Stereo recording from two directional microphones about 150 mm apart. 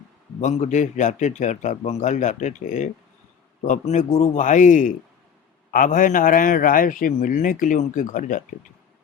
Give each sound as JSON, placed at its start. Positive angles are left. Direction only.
{"t": 0.4, "sound": "a man's voice", "side_deg": 50}